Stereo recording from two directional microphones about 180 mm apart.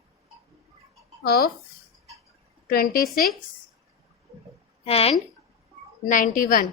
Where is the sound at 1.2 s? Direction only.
60° left (ahead or behind).